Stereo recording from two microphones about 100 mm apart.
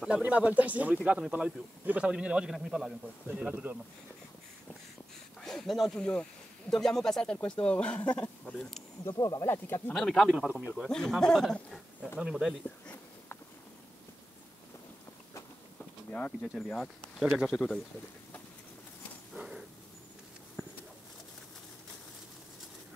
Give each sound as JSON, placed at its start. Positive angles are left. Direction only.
{"t": 0.0, "sound": "a man's voice", "side_deg": -15}
{"t": 3.3, "sound": "a man's voice", "side_deg": -15}
{"t": 5.4, "sound": "speech", "side_deg": 5}
{"t": 8.5, "sound": "speech", "side_deg": 0}
{"t": 9.1, "sound": "speech", "side_deg": 35}
{"t": 9.5, "sound": "speech", "side_deg": 25}
{"t": 9.9, "sound": "speech", "side_deg": 5}
{"t": 10.3, "sound": "a man's voice", "side_deg": -10}
{"t": 10.9, "sound": "speech", "side_deg": 5}
{"t": 16.1, "sound": "speech", "side_deg": 10}
{"t": 16.4, "sound": "speech", "side_deg": 0}
{"t": 19.3, "sound": "a sound", "side_deg": -5}